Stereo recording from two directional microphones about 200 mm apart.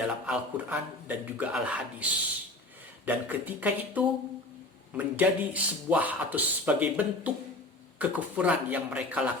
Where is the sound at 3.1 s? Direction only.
10° right (ahead or behind).